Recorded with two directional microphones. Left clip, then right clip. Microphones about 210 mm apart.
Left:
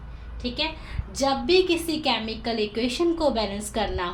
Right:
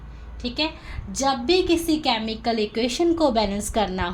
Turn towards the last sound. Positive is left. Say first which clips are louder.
# right 3 dB
turn(degrees=-40)  # may be behind; listen again after turning